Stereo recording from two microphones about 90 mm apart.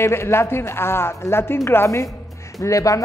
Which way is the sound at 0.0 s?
30° left (ahead or behind).